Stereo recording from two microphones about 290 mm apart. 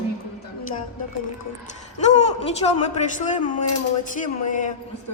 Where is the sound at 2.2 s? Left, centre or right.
Left.